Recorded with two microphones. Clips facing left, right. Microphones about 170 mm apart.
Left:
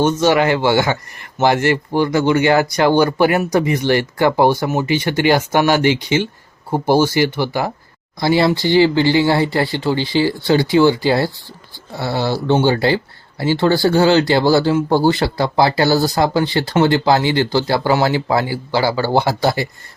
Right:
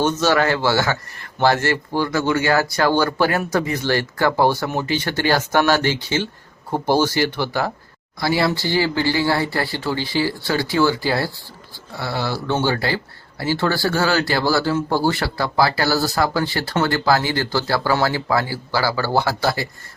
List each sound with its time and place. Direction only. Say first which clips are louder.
0.0 s speech: left 4 dB; 10° left (ahead or behind)
8.2 s speech: left 5 dB; 25° left (ahead or behind)